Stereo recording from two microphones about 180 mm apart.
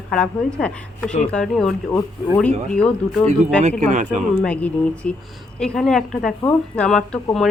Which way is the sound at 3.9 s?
40° right (ahead or behind).